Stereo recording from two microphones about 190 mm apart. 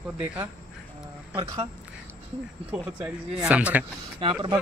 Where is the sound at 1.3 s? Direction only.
25° right (ahead or behind).